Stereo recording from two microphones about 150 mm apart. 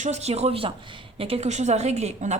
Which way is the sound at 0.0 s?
45° right (ahead or behind).